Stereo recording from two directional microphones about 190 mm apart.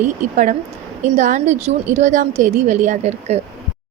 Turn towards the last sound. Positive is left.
turn(degrees=-35)  # may be behind; listen again after turning